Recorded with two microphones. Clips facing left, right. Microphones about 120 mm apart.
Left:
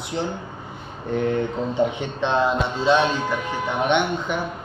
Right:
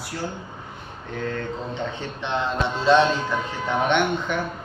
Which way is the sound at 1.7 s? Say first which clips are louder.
Left 7 dB; 10° left (ahead or behind).